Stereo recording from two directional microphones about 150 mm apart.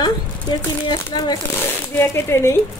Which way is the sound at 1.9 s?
15° left (ahead or behind).